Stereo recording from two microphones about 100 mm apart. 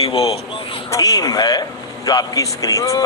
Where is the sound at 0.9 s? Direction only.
40° left (ahead or behind).